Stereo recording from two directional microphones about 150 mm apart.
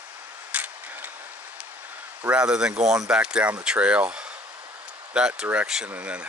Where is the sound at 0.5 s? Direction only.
10° right (ahead or behind).